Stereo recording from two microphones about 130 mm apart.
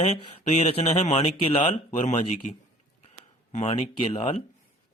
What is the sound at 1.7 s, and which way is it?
Speech, 70° left (ahead or behind).